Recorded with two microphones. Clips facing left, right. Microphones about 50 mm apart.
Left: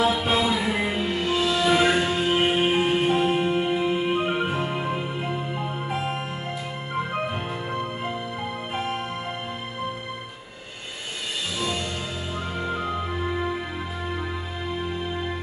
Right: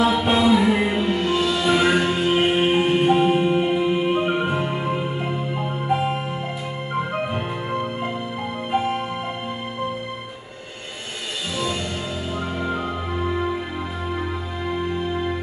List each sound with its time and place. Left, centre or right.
0.0 s music: centre
7.3 s music: centre